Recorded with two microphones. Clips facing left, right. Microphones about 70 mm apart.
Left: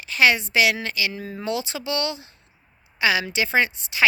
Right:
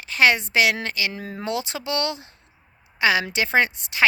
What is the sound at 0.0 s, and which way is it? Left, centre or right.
A woman's voice, right.